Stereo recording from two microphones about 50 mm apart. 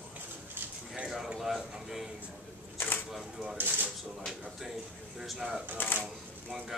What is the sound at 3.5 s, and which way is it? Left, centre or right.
Speech, right.